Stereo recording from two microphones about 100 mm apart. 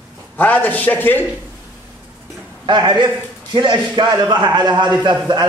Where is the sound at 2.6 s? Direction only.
50° right (ahead or behind).